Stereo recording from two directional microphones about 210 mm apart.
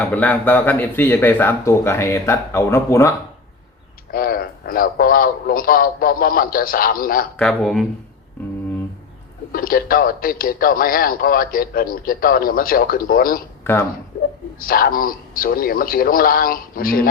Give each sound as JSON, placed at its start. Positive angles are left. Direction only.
{"t": 0.1, "sound": "speech", "side_deg": 10}
{"t": 4.1, "sound": "speech", "side_deg": 45}
{"t": 7.3, "sound": "speech", "side_deg": 5}
{"t": 9.5, "sound": "speech", "side_deg": 45}
{"t": 14.6, "sound": "speech", "side_deg": 45}